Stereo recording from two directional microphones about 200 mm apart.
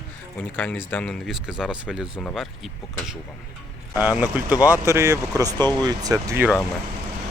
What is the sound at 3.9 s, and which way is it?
Speech, 10° right (ahead or behind).